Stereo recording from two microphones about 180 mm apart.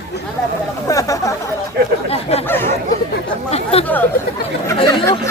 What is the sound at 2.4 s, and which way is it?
Chatter, 10° left (ahead or behind).